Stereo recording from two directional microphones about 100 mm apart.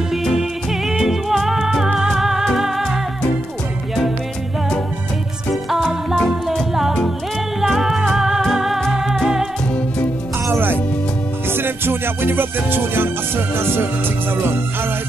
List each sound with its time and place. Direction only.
0.1 s music: 5° right (ahead or behind)
5.7 s music: centre (ahead or behind)
10.5 s music: 20° right (ahead or behind)
13.6 s speech: 25° right (ahead or behind)